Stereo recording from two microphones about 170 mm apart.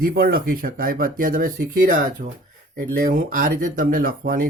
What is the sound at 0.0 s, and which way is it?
Speech, 65° right (ahead or behind).